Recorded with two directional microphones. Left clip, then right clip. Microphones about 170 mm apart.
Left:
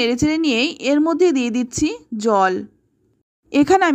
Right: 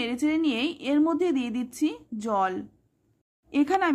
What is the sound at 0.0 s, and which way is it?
Speech, 35° left (ahead or behind).